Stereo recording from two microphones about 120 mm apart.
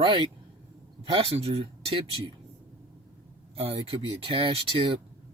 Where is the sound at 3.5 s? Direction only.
50° right (ahead or behind).